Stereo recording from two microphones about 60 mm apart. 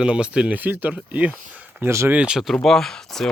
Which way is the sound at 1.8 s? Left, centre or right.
Right.